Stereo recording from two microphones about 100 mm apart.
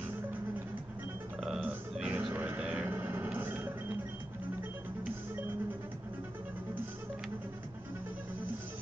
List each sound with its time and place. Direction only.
1.4 s burping: 5° right (ahead or behind)
1.7 s burping: 15° right (ahead or behind)
2.3 s a sound: 20° right (ahead or behind)
5.0 s music: 15° right (ahead or behind)